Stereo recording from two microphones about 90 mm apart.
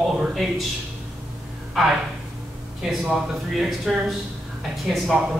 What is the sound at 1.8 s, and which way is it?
Speech, 5° right (ahead or behind).